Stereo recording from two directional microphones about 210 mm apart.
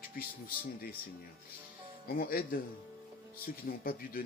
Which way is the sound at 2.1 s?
45° left (ahead or behind).